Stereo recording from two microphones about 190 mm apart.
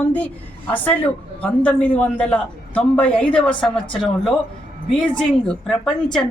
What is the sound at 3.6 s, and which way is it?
Speech, 25° left (ahead or behind).